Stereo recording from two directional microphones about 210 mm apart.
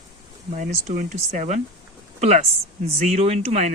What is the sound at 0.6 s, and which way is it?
Speech, 35° right (ahead or behind).